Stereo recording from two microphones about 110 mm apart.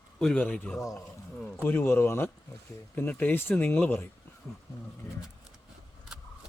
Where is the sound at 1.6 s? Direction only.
20° left (ahead or behind).